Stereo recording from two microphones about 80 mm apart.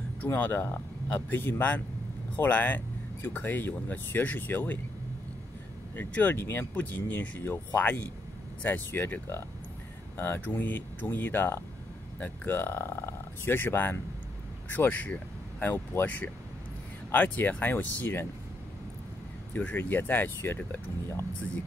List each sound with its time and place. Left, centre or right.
0.2 s speech: left
5.9 s speech: left
19.5 s speech: left